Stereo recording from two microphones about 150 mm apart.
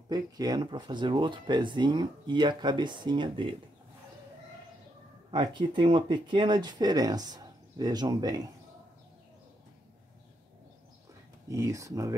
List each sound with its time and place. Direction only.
0.1 s speech: 25° right (ahead or behind)
5.3 s speech: 30° right (ahead or behind)
11.4 s speech: 20° right (ahead or behind)